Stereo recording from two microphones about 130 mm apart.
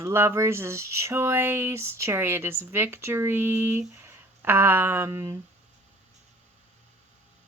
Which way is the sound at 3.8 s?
15° right (ahead or behind).